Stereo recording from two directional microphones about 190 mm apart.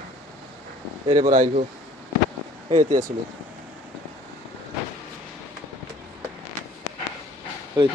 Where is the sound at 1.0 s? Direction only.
35° right (ahead or behind).